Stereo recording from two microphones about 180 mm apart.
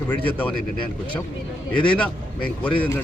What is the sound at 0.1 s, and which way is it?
Speech, 10° left (ahead or behind).